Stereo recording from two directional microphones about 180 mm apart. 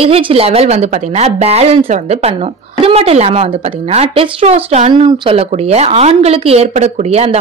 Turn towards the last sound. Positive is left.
turn(degrees=-35)  # may be behind; listen again after turning